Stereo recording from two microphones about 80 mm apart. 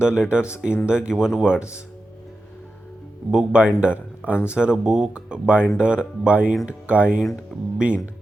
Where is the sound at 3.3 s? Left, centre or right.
Centre.